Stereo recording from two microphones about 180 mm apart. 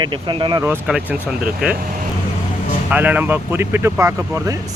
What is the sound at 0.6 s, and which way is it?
Speech, 10° right (ahead or behind).